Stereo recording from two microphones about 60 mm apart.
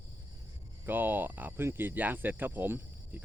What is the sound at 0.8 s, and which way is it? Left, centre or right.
Speech, right.